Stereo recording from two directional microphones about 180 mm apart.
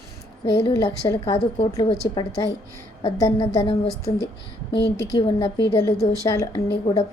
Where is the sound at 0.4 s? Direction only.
20° left (ahead or behind).